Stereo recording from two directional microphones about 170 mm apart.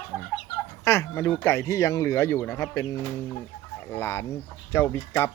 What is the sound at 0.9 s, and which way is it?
Speech, 15° left (ahead or behind).